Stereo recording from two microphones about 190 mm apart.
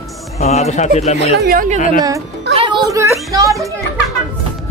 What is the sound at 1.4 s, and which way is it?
Speech, 45° right (ahead or behind).